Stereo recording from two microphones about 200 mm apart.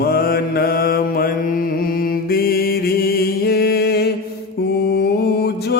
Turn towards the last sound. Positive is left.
turn(degrees=55)  # may be behind; listen again after turning